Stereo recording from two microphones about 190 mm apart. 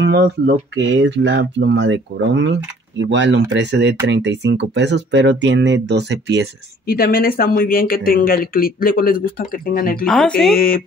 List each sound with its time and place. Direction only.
0.0 s speech: 65° right (ahead or behind)
6.9 s speech: 55° left (ahead or behind)
10.0 s speech: 5° left (ahead or behind)
10.5 s speech: 50° left (ahead or behind)